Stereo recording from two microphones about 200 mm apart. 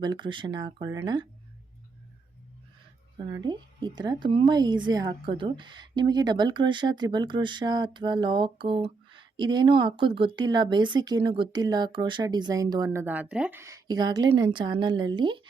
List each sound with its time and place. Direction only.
0.0 s a woman's voice: 20° right (ahead or behind)
3.2 s a woman's voice: 20° right (ahead or behind)